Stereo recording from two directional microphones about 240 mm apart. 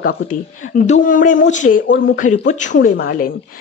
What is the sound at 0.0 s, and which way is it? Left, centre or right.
A woman's voice, left.